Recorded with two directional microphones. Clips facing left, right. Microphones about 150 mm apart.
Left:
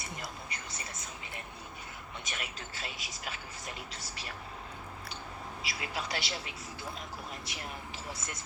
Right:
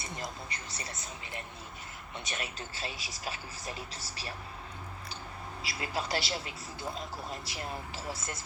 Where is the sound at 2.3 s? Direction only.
30° right (ahead or behind).